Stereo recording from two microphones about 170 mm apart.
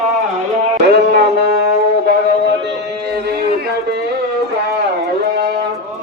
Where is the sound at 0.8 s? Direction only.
70° right (ahead or behind).